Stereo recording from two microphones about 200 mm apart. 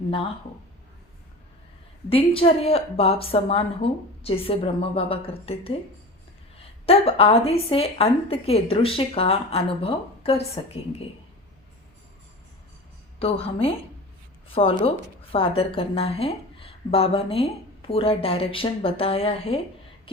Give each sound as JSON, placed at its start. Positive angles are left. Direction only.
{"t": 2.0, "sound": "a woman's voice", "side_deg": 30}
{"t": 6.8, "sound": "a woman's voice", "side_deg": 30}
{"t": 13.1, "sound": "a woman's voice", "side_deg": 30}